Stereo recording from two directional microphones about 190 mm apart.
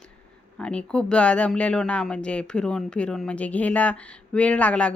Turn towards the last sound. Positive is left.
turn(degrees=5)  # may be behind; listen again after turning